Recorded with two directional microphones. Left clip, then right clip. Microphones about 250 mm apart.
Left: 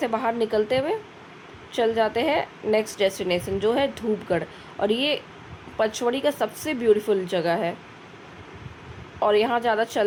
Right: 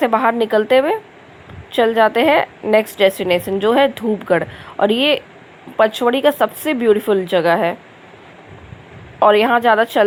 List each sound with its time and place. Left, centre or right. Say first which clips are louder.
0.0 s a woman's voice: right 9 dB; centre
9.2 s a woman's voice: right 9 dB; centre